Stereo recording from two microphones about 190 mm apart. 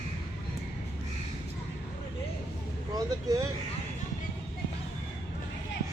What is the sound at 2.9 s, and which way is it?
Speech, 20° right (ahead or behind).